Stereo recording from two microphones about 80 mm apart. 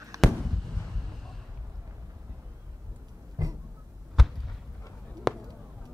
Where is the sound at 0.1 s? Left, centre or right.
Right.